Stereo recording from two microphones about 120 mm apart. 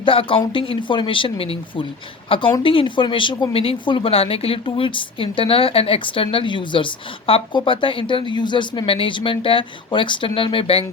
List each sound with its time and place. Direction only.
0.0 s speech: 50° left (ahead or behind)